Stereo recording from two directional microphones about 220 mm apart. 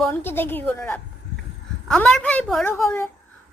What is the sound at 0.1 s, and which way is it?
A child's voice, 10° left (ahead or behind).